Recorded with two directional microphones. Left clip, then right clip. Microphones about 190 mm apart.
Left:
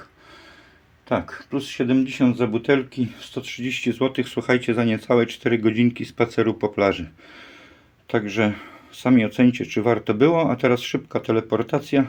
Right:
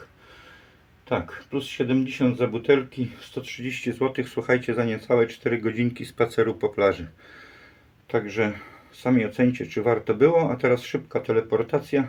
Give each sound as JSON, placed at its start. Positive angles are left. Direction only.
{"t": 1.0, "sound": "speech", "side_deg": 40}
{"t": 8.1, "sound": "speech", "side_deg": 40}